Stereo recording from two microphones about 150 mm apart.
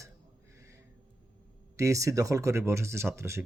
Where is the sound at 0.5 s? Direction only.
20° right (ahead or behind).